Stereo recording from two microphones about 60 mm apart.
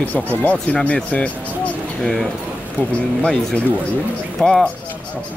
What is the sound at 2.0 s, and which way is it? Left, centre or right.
Speech, centre.